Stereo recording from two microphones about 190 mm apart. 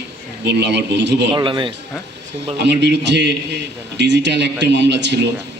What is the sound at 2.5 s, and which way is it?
A man's voice, 65° right (ahead or behind).